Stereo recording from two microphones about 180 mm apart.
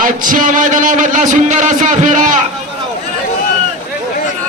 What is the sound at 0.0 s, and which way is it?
A man's voice, 50° right (ahead or behind).